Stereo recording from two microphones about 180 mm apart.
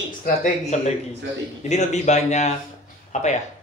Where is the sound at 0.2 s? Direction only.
45° left (ahead or behind).